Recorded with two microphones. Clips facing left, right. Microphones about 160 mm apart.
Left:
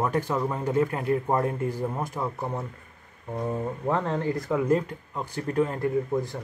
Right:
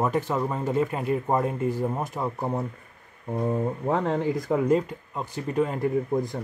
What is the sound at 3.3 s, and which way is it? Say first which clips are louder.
Speech: right 3 dB; 20° right (ahead or behind).